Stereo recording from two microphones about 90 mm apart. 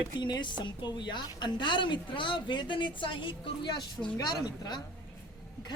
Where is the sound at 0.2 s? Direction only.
55° left (ahead or behind).